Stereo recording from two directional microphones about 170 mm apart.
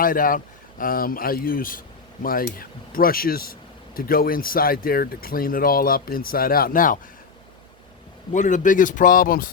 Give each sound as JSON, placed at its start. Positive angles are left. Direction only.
{"t": 0.0, "sound": "speech", "side_deg": 55}
{"t": 8.3, "sound": "speech", "side_deg": 45}